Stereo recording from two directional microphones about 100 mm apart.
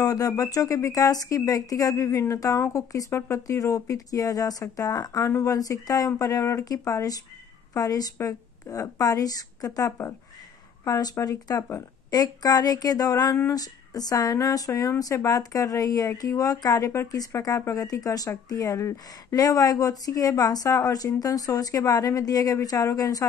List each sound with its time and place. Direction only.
0.0 s speech: 35° left (ahead or behind)